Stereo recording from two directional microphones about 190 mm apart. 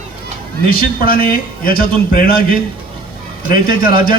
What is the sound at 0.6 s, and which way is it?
A man's voice, 50° left (ahead or behind).